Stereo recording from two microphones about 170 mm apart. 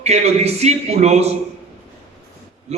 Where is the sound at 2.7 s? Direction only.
40° right (ahead or behind).